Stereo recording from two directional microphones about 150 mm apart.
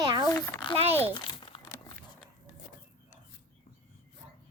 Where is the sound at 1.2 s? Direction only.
35° left (ahead or behind).